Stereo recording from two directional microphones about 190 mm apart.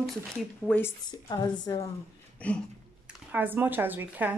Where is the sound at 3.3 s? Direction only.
10° right (ahead or behind).